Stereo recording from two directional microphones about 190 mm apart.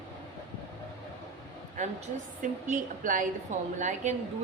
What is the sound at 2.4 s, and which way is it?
A woman's voice, 45° right (ahead or behind).